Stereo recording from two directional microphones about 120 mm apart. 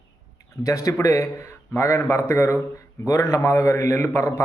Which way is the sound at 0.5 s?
25° left (ahead or behind).